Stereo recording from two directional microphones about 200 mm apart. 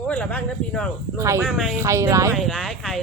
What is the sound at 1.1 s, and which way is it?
Speech, 15° right (ahead or behind).